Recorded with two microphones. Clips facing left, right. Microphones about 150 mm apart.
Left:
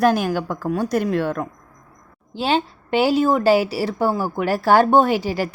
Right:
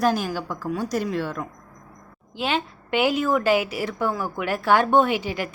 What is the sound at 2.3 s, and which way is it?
A woman's voice, 30° left (ahead or behind).